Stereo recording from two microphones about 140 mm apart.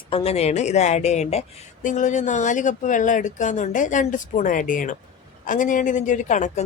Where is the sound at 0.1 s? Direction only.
45° left (ahead or behind).